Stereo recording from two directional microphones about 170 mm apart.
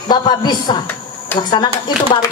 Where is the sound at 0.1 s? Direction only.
25° left (ahead or behind).